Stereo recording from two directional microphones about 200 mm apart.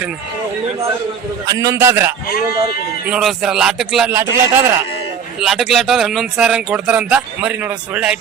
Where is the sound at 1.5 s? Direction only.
15° right (ahead or behind).